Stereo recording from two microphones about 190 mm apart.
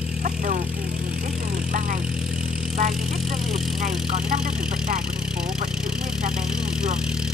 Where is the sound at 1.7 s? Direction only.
45° right (ahead or behind).